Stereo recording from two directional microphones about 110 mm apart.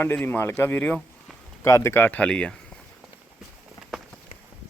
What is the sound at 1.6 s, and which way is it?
Speech, 25° left (ahead or behind).